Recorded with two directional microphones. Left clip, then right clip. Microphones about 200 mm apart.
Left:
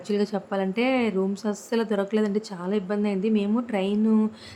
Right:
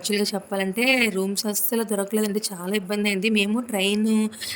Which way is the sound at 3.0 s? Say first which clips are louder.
Right 3 dB; 55° right (ahead or behind).